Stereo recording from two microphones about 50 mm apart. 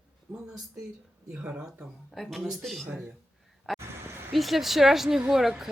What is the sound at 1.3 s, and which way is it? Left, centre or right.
Speech, right.